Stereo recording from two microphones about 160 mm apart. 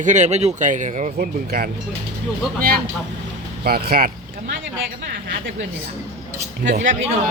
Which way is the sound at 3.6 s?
75° right (ahead or behind).